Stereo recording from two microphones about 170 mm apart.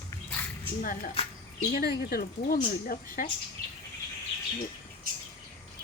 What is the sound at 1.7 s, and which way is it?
A woman's voice, 65° left (ahead or behind).